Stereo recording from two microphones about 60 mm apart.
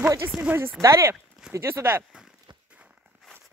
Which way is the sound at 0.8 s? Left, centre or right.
Right.